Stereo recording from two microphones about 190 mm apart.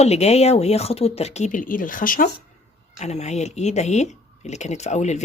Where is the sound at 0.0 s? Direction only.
35° left (ahead or behind).